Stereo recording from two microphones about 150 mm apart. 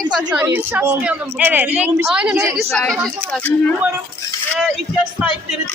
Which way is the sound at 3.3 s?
5° left (ahead or behind).